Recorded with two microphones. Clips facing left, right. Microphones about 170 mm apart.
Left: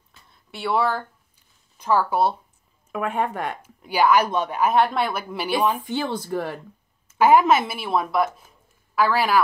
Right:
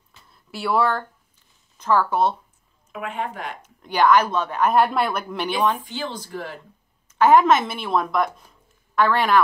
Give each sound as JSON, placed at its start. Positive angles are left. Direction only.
{"t": 0.3, "sound": "a woman's voice", "side_deg": 0}
{"t": 2.9, "sound": "speech", "side_deg": 55}
{"t": 3.6, "sound": "a woman's voice", "side_deg": 10}
{"t": 5.9, "sound": "speech", "side_deg": 60}
{"t": 7.1, "sound": "a woman's voice", "side_deg": 10}